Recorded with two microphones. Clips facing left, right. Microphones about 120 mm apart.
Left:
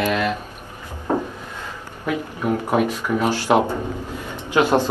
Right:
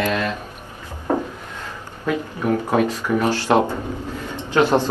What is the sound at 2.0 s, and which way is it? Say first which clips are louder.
Speech: right 1 dB; 15° left (ahead or behind).